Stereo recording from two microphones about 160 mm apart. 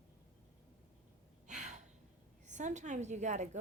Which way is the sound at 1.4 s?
50° right (ahead or behind).